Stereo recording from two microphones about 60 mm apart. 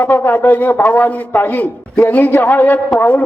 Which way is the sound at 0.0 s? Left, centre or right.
Left.